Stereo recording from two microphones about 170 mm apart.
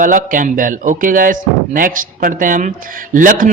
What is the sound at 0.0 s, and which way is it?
Speech, 50° right (ahead or behind).